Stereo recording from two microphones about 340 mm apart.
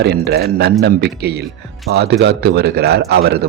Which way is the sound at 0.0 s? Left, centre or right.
Right.